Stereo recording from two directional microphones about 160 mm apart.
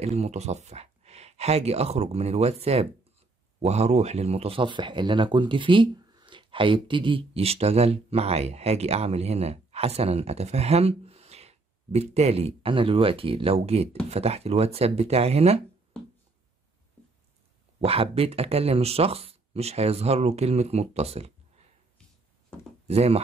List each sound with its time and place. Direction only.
0.0 s speech: 40° right (ahead or behind)
17.7 s speech: 40° right (ahead or behind)
22.8 s speech: 40° right (ahead or behind)